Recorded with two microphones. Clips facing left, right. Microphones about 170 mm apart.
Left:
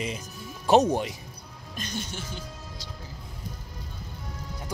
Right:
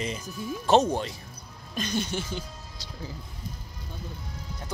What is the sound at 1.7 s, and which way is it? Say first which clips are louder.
Speech: right 6 dB; 75° right (ahead or behind).